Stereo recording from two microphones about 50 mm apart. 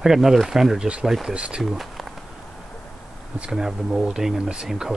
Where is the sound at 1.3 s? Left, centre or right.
Right.